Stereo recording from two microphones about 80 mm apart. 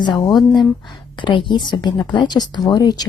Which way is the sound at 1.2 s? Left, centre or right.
Left.